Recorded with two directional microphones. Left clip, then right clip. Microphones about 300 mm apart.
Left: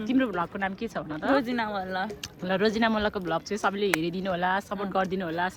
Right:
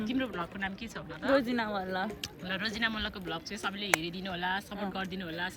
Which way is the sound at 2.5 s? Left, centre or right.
Centre.